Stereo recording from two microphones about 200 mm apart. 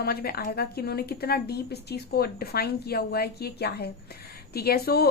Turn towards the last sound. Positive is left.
turn(degrees=50)  # may be behind; listen again after turning